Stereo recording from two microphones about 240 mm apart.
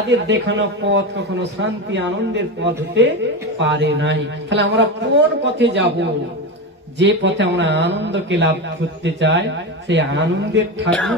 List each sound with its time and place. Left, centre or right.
0.1 s a man's voice: right
10.9 s speech: centre